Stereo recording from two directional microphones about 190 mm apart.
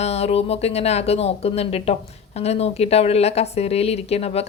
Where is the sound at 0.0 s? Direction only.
35° left (ahead or behind).